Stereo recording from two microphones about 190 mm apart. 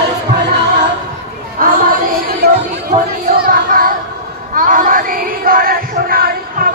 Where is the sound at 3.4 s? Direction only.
50° right (ahead or behind).